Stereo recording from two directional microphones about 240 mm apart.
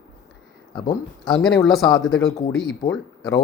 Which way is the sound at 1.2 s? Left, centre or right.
Centre.